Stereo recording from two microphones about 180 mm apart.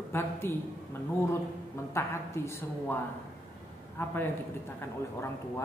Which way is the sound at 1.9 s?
15° left (ahead or behind).